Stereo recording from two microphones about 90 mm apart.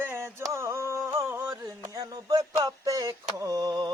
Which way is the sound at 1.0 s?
30° right (ahead or behind).